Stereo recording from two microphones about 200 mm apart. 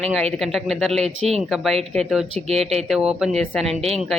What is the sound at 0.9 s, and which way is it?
Speech, 30° right (ahead or behind).